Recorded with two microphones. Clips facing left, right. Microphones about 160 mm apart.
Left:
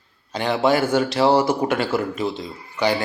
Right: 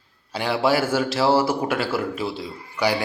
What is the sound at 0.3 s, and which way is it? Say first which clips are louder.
A man's voice: left 2 dB; 10° right (ahead or behind).